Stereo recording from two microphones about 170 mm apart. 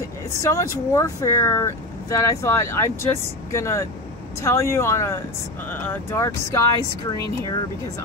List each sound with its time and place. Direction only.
0.3 s speech: 20° left (ahead or behind)